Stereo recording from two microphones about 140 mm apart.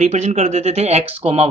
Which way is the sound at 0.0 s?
55° right (ahead or behind).